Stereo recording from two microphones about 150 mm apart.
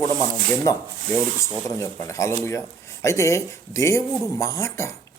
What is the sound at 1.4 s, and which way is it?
Speech, 20° left (ahead or behind).